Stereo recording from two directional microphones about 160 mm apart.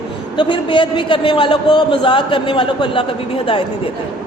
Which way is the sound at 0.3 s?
30° left (ahead or behind).